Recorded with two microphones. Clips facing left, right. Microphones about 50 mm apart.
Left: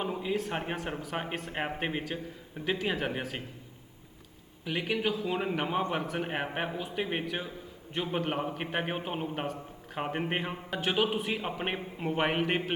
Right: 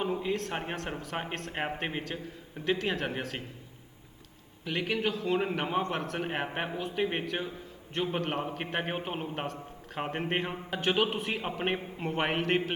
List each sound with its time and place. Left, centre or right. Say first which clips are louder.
0.0 s a sound: right 2 dB; centre
0.3 s a man's voice: left 1 dB; centre
4.6 s a man's voice: even; centre